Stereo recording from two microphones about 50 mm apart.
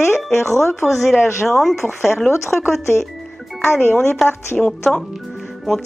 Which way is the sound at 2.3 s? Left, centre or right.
Left.